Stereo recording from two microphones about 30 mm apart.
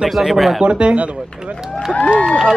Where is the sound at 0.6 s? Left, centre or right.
Right.